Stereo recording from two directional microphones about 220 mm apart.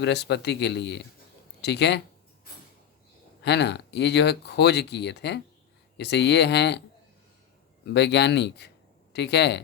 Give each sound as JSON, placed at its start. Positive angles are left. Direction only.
{"t": 0.0, "sound": "speech", "side_deg": 50}
{"t": 3.4, "sound": "speech", "side_deg": 50}
{"t": 7.9, "sound": "speech", "side_deg": 50}